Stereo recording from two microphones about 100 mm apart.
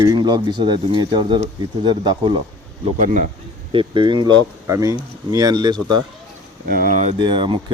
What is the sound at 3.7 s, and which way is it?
Speech, 55° right (ahead or behind).